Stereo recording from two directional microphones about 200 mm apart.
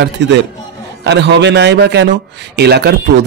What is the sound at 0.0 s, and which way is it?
A man's voice, 60° right (ahead or behind).